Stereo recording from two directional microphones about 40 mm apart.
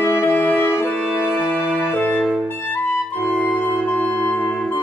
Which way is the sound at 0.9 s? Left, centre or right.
Left.